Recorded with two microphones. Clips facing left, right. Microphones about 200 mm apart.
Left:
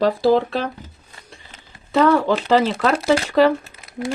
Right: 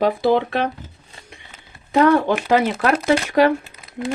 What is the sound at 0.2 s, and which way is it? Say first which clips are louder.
Speech: left 1 dB; 60° right (ahead or behind).